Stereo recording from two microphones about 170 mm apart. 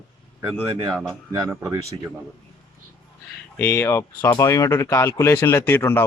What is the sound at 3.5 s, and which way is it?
Speech, 15° left (ahead or behind).